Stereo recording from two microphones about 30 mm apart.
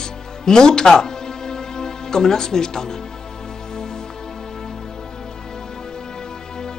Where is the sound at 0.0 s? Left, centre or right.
Left.